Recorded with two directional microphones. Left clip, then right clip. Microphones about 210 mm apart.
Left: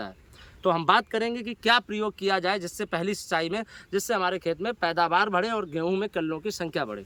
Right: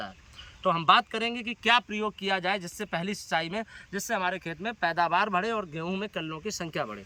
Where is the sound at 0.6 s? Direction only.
25° left (ahead or behind).